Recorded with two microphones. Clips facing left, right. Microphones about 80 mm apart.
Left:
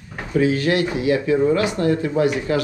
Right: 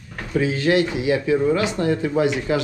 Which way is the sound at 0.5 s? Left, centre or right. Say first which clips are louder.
Right 1 dB; right.